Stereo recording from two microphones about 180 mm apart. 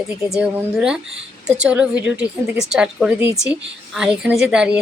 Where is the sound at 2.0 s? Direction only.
25° left (ahead or behind).